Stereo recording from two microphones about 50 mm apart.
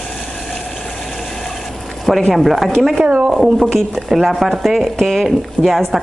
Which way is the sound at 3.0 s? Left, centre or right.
Right.